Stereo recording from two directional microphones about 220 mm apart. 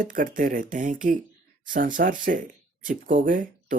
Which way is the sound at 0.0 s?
40° right (ahead or behind).